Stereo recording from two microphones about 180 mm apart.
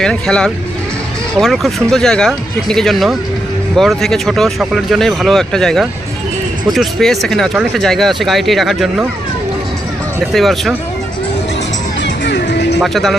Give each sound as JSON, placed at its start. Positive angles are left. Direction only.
{"t": 0.0, "sound": "speech", "side_deg": 5}
{"t": 10.3, "sound": "speech", "side_deg": 0}
{"t": 12.0, "sound": "music", "side_deg": 75}
{"t": 12.8, "sound": "speech", "side_deg": 0}